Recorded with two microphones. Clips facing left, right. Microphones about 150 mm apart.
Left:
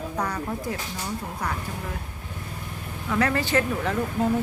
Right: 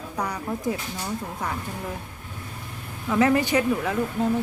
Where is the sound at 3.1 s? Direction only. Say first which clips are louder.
Right 3 dB; 20° right (ahead or behind).